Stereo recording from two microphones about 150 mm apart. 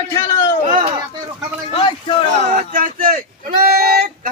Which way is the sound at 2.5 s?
65° right (ahead or behind).